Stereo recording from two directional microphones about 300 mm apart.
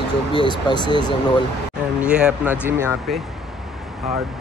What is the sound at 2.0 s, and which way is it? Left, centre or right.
Speech, centre.